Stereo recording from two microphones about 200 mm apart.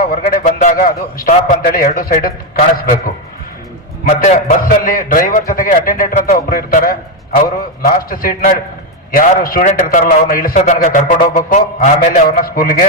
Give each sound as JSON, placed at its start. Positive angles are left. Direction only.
{"t": 0.1, "sound": "a man's voice", "side_deg": 45}
{"t": 4.2, "sound": "a man's voice", "side_deg": 45}